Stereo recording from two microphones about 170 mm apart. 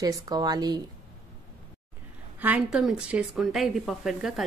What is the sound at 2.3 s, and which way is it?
A woman's voice, 10° right (ahead or behind).